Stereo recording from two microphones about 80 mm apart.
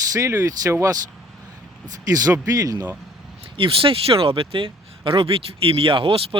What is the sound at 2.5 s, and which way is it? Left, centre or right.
Speech, right.